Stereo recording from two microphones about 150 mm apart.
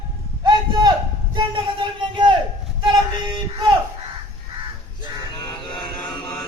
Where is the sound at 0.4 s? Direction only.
30° right (ahead or behind).